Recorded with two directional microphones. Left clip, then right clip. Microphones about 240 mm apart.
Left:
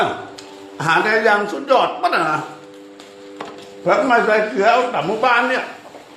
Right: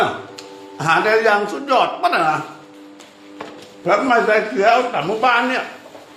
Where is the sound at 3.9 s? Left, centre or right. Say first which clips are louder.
Even; centre.